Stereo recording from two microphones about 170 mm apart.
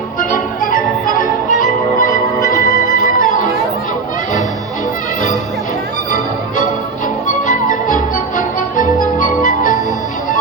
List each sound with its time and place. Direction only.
0.2 s music: 55° left (ahead or behind)
7.3 s music: 50° left (ahead or behind)